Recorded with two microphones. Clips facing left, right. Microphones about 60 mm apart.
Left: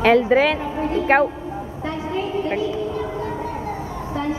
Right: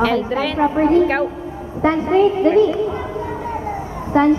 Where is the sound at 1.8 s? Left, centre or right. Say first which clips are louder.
Right 12 dB; right.